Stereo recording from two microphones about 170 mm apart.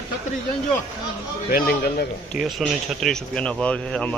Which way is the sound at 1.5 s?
60° left (ahead or behind).